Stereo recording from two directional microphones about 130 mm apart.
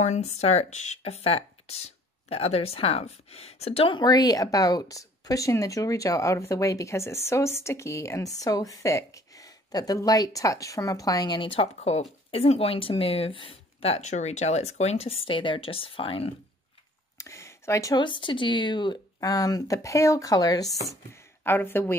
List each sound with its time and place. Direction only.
0.0 s speech: 60° left (ahead or behind); by 16.3 s 45° left (ahead or behind)
17.2 s a sound: 20° left (ahead or behind)
17.9 s speech: 40° left (ahead or behind)
20.9 s speech: 20° left (ahead or behind)